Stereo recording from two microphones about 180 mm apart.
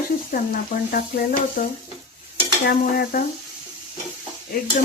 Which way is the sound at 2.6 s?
55° left (ahead or behind).